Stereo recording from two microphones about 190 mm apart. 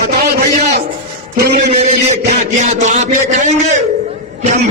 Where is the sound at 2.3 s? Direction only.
40° right (ahead or behind).